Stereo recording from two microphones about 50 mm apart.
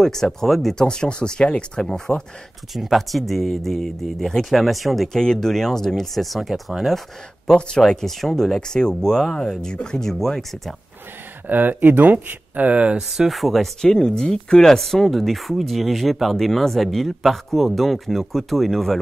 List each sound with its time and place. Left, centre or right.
0.0 s speech: centre
0.7 s speech: centre
2.7 s speech: centre
5.2 s speech: centre
7.4 s speech: centre
11.4 s speech: right
13.3 s speech: centre